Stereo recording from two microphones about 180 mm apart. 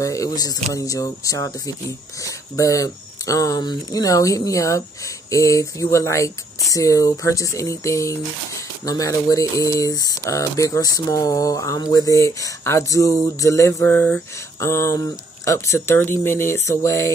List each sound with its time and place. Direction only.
0.0 s speech: 20° left (ahead or behind)